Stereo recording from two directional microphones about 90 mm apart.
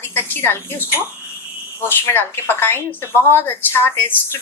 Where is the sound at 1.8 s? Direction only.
25° left (ahead or behind).